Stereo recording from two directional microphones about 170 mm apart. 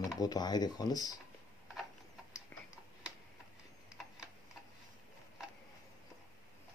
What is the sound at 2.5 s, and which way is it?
Tick-tock, 10° left (ahead or behind).